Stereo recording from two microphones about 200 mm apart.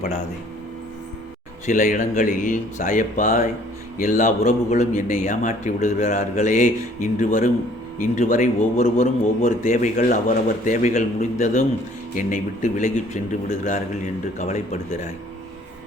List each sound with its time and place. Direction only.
1.6 s a man's voice: 40° left (ahead or behind)
14.3 s a man's voice: 35° left (ahead or behind)